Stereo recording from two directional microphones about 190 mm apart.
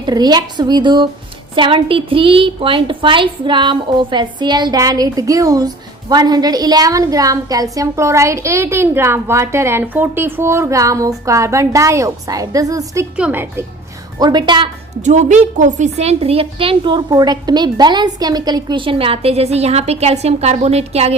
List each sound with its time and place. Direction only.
0.0 s a woman's voice: 20° right (ahead or behind)
14.2 s a woman's voice: 20° right (ahead or behind)
15.0 s a woman's voice: 40° right (ahead or behind)